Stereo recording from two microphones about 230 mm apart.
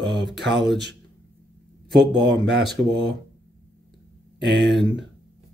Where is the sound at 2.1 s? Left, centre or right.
Right.